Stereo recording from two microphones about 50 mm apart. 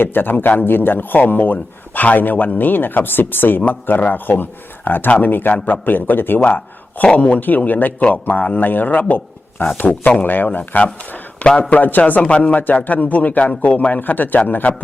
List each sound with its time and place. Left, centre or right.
0.0 s speech: left
7.0 s speech: left